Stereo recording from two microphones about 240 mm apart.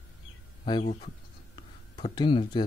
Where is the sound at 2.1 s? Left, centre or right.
Centre.